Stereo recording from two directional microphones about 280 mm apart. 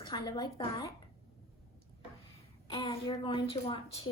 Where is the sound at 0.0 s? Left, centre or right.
Centre.